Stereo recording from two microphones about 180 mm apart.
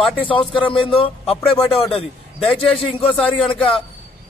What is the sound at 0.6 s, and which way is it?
Speech, 30° left (ahead or behind).